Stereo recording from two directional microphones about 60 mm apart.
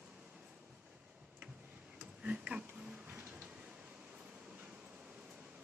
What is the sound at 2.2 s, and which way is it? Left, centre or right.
Tick-tock, centre.